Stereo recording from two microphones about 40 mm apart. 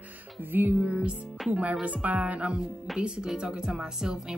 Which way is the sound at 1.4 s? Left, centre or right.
Centre.